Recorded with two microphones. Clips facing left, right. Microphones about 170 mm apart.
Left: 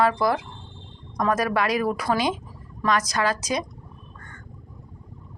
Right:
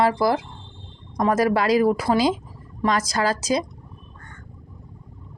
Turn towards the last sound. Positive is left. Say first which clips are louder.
# right 3 dB
turn(degrees=-30)  # may be behind; listen again after turning